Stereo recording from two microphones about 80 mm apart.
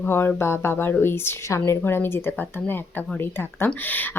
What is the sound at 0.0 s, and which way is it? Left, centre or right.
Speech, left.